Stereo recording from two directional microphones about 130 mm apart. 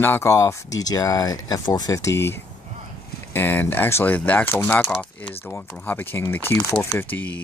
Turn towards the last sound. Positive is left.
turn(degrees=10)  # may be behind; listen again after turning